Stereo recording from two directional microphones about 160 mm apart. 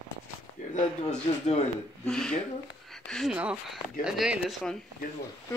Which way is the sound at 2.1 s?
5° left (ahead or behind).